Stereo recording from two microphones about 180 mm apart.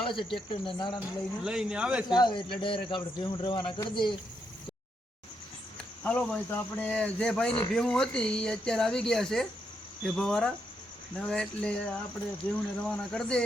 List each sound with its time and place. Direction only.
0.0 s speech: 25° left (ahead or behind)
1.5 s speech: 5° right (ahead or behind)
2.0 s speech: 25° left (ahead or behind)
6.0 s speech: 5° left (ahead or behind)